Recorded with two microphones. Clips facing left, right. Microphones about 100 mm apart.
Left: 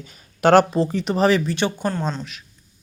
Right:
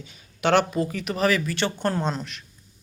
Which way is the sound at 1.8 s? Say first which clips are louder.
Left 1 dB; centre (ahead or behind).